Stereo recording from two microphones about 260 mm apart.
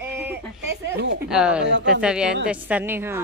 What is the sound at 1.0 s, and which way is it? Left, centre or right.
Speech, right.